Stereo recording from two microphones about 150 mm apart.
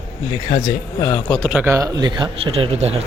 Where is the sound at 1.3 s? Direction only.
5° right (ahead or behind).